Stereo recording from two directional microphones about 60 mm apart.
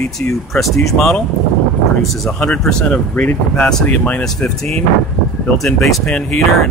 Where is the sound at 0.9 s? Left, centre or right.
Centre.